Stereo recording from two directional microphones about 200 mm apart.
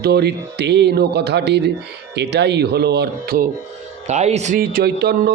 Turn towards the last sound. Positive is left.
turn(degrees=-55)  # may be behind; listen again after turning